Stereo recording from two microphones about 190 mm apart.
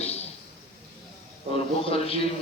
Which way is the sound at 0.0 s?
35° left (ahead or behind).